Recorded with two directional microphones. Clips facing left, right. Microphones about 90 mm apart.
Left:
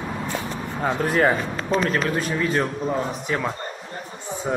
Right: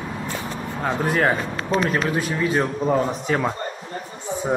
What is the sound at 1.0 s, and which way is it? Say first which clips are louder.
Speech: left 1 dB; 5° right (ahead or behind).